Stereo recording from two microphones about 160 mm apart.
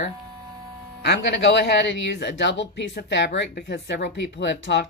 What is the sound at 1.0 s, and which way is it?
Speech, 90° left.